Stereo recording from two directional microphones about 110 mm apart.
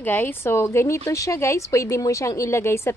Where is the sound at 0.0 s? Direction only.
15° left (ahead or behind).